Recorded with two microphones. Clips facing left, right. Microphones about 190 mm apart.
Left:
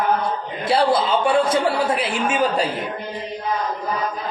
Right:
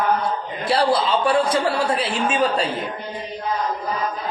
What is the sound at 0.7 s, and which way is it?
A man's voice, 25° left (ahead or behind).